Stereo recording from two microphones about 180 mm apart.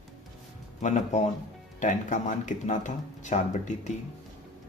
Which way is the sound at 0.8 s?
40° left (ahead or behind).